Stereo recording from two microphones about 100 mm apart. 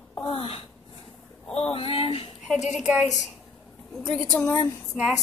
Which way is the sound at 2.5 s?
Centre (ahead or behind).